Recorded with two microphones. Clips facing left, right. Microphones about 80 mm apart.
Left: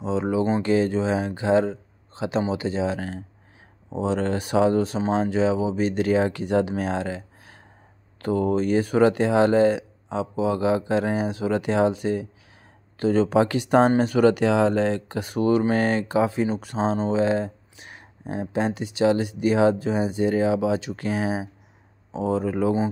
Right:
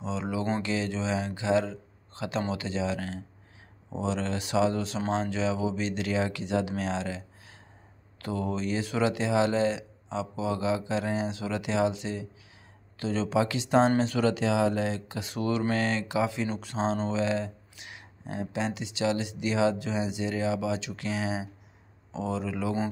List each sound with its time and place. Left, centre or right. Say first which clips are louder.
0.0 s a sound: left 8 dB; left
0.6 s speech: left 9 dB; left
6.8 s speech: left 5 dB; left
11.1 s speech: left 5 dB; left
11.3 s speech: left 7 dB; left
13.1 s speech: left 7 dB; left
14.0 s speech: left 8 dB; left
14.4 s speech: left 6 dB; left
15.0 s speech: left 8 dB; left
15.7 s speech: left 6 dB; left